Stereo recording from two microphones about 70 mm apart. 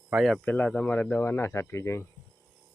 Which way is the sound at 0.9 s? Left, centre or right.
Left.